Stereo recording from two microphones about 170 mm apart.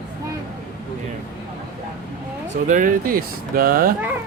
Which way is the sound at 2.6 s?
50° right (ahead or behind).